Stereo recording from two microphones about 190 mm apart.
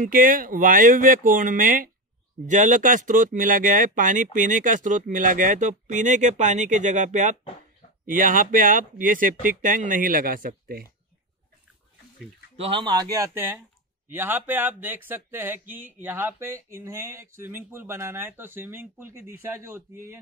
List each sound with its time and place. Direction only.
0.0 s speech: 45° right (ahead or behind)
12.5 s speech: 30° right (ahead or behind)
13.1 s speech: 15° right (ahead or behind)